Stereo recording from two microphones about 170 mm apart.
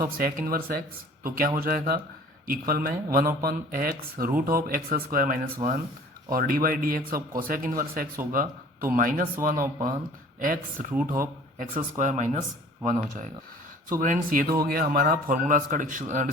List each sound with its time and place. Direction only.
0.0 s speech: 60° right (ahead or behind)
14.0 s speech: 50° right (ahead or behind)